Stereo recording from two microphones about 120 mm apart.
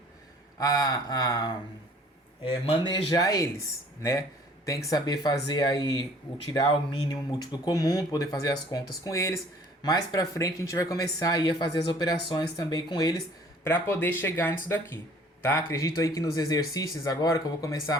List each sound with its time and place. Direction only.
0.6 s speech: 30° left (ahead or behind)
2.4 s speech: 45° left (ahead or behind)
13.7 s speech: 20° left (ahead or behind)